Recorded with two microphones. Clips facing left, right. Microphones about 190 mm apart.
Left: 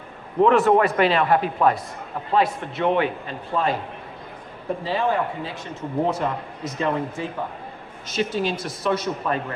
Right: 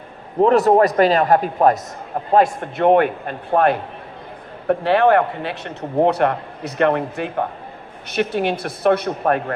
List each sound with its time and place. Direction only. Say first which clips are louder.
0.4 s a man's voice: right 3 dB; 40° right (ahead or behind); by 9.4 s 60° right (ahead or behind)